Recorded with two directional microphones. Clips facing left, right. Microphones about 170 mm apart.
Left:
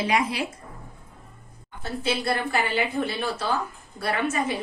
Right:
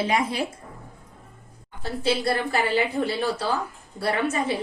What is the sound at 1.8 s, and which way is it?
A woman's voice, 35° right (ahead or behind).